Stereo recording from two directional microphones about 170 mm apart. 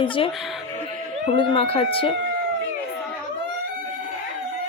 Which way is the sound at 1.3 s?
35° left (ahead or behind).